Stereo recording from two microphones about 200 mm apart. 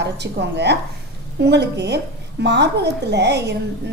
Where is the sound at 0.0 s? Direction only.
60° right (ahead or behind).